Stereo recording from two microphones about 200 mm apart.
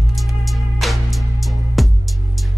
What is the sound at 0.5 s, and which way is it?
Music, centre (ahead or behind).